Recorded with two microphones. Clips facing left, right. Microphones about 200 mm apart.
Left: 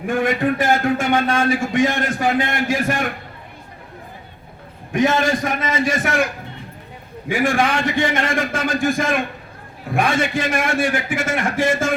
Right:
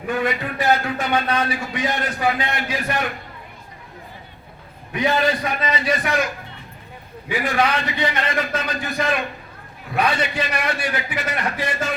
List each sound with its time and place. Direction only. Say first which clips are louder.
0.1 s a man's voice: left 5 dB; 50° left (ahead or behind)
4.9 s a man's voice: left 3 dB; 50° left (ahead or behind)
7.3 s a man's voice: left 3 dB; 50° left (ahead or behind)